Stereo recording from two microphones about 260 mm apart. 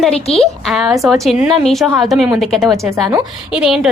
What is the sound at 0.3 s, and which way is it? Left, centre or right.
A woman's voice, centre.